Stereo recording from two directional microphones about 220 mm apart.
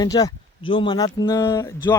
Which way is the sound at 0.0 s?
15° left (ahead or behind).